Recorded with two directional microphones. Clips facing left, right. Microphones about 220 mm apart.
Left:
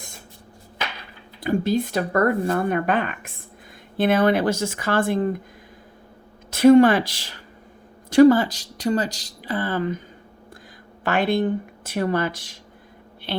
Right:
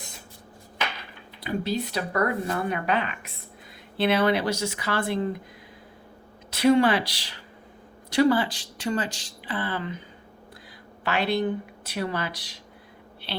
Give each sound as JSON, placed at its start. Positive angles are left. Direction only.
{"t": 1.4, "sound": "speech", "side_deg": 50}
{"t": 6.5, "sound": "speech", "side_deg": 45}
{"t": 11.0, "sound": "speech", "side_deg": 50}